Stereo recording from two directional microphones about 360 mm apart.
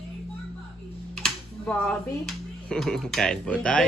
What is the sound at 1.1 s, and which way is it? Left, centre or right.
Speech, centre.